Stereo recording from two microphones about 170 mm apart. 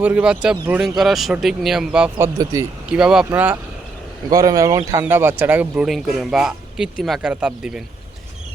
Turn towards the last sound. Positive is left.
turn(degrees=-5)  # may be behind; listen again after turning